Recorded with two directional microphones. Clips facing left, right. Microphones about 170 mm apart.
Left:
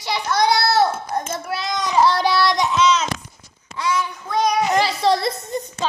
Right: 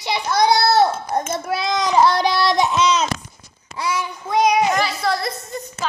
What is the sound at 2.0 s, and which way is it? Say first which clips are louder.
Child singing: right 1 dB; 15° right (ahead or behind).